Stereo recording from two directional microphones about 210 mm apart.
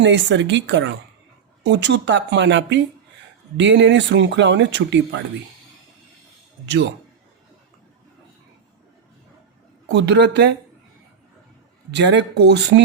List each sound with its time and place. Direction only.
0.0 s speech: 60° right (ahead or behind)
9.9 s speech: 55° right (ahead or behind)
11.9 s speech: 55° right (ahead or behind)